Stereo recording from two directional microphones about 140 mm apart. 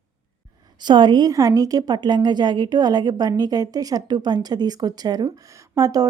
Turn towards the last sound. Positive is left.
turn(degrees=-25)  # may be behind; listen again after turning